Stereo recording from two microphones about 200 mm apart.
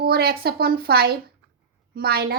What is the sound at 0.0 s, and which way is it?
A woman's voice, 50° right (ahead or behind).